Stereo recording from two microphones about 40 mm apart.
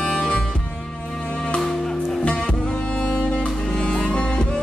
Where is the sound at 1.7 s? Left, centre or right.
Centre.